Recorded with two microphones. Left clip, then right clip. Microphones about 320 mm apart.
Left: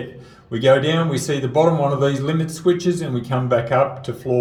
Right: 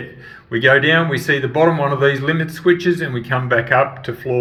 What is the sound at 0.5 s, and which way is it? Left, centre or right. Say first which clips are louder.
Speech: right 3 dB; centre.